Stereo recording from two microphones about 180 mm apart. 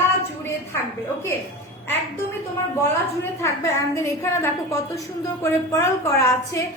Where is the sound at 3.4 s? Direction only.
15° left (ahead or behind).